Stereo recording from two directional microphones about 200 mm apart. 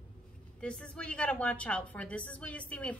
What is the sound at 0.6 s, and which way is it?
A woman's voice, 5° left (ahead or behind).